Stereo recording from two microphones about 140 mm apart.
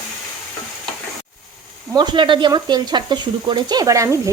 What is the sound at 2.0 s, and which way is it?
Speech, 35° right (ahead or behind).